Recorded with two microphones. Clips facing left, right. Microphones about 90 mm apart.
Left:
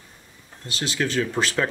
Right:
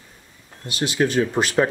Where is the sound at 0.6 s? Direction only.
15° right (ahead or behind).